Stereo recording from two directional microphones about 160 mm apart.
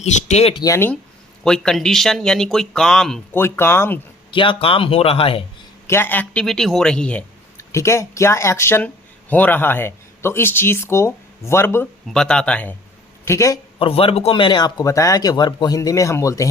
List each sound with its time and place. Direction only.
0.0 s speech: 45° left (ahead or behind)
0.6 s speech: 15° left (ahead or behind)
1.5 s speech: 5° left (ahead or behind)
3.3 s speech: 15° left (ahead or behind)
4.3 s speech: 30° left (ahead or behind)
5.9 s speech: 10° left (ahead or behind)
7.7 s speech: 15° left (ahead or behind)
12.0 s speech: 5° left (ahead or behind)
13.2 s a man's voice: 20° left (ahead or behind)
13.7 s a man's voice: 35° left (ahead or behind)